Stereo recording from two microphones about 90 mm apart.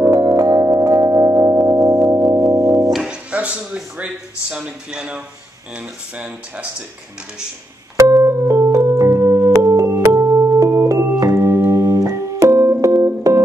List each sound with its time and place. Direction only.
0.0 s music: 40° right (ahead or behind)
2.9 s music: 5° right (ahead or behind)
5.8 s speech: 15° right (ahead or behind)
8.0 s keyboard: 35° right (ahead or behind)
12.8 s music: 40° right (ahead or behind)